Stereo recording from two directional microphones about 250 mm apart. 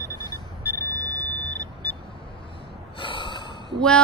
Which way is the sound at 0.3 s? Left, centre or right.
Centre.